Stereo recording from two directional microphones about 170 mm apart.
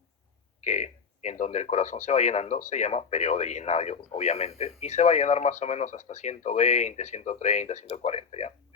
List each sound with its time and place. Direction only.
0.6 s speech: 45° left (ahead or behind)